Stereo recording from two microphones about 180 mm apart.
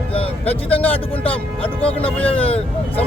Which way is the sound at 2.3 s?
30° left (ahead or behind).